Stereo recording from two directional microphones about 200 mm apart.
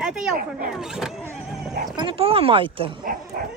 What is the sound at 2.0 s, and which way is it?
Speech, 25° right (ahead or behind).